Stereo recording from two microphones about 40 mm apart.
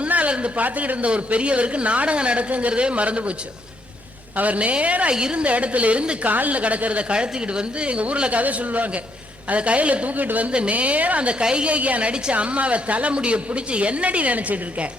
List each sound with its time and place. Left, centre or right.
0.1 s a sound: right
0.6 s a man's voice: right
0.9 s speech: right
4.4 s speech: right
5.1 s speech: right
6.2 s speech: right
10.5 s speech: right